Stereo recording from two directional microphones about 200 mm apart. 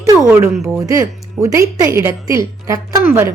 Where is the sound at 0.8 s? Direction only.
15° right (ahead or behind).